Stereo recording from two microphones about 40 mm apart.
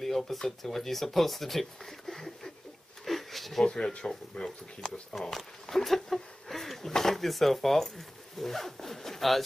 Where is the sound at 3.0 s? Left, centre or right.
Centre.